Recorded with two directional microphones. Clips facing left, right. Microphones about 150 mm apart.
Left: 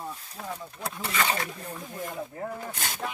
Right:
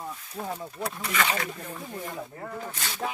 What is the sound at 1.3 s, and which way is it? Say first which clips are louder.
Speech: even; 35° left (ahead or behind).